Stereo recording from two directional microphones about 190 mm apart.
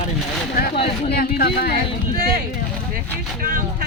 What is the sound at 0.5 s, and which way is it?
Speech, 50° left (ahead or behind).